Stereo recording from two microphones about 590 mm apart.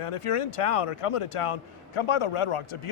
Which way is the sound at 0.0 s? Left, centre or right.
Left.